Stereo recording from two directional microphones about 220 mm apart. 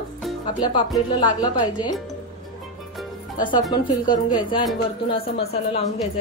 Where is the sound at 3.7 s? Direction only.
20° left (ahead or behind).